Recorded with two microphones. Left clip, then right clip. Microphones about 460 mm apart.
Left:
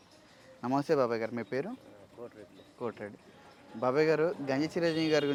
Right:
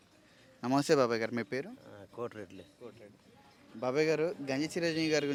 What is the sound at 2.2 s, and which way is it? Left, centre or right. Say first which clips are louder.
Speech: right 7 dB; right.